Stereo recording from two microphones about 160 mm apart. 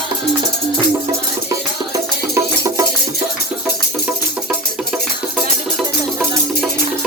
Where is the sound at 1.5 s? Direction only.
20° right (ahead or behind).